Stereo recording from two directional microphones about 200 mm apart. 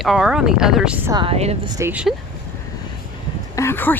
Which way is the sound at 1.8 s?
5° right (ahead or behind).